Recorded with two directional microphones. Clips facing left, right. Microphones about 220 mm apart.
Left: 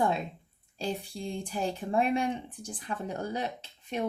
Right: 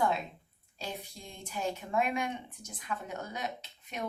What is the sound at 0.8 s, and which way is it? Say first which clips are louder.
Speech: left 8 dB; 30° left (ahead or behind).